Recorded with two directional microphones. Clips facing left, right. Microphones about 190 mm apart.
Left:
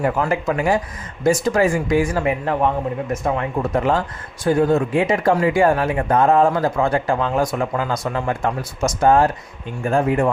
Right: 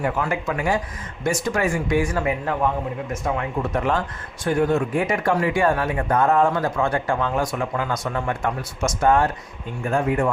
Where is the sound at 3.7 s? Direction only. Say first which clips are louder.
Left 4 dB; 30° left (ahead or behind).